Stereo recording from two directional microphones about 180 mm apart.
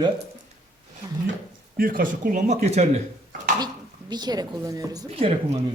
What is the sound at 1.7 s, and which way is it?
Speech, 55° right (ahead or behind).